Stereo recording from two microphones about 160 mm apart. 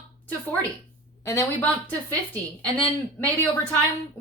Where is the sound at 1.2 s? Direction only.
15° left (ahead or behind).